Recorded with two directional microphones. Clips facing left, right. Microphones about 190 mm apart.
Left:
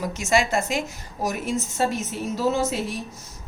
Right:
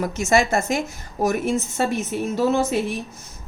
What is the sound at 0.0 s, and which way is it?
A woman's voice, 50° right (ahead or behind).